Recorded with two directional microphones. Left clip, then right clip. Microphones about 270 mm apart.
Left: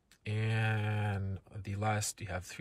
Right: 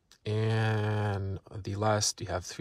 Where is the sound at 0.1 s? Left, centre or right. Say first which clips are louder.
Right 6 dB; centre.